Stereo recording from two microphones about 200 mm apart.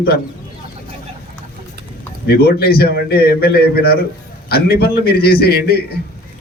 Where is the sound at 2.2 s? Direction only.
50° left (ahead or behind).